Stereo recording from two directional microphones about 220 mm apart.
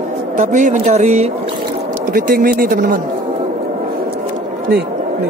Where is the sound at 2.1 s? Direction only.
40° right (ahead or behind).